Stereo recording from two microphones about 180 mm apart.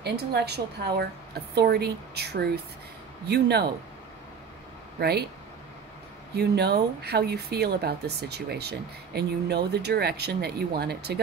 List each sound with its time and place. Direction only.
0.0 s speech: 65° right (ahead or behind)
6.3 s speech: 65° right (ahead or behind)